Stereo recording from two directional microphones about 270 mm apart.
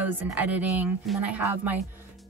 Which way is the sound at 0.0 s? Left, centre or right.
Centre.